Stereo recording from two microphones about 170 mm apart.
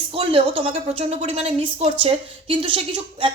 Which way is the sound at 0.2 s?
35° right (ahead or behind).